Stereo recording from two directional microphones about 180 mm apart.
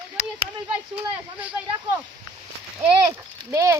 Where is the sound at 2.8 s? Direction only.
15° right (ahead or behind).